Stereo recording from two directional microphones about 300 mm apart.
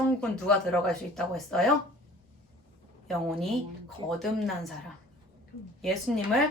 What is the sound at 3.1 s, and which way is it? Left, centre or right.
A woman's voice, centre.